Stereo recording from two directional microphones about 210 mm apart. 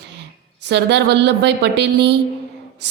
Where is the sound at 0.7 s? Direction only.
55° right (ahead or behind).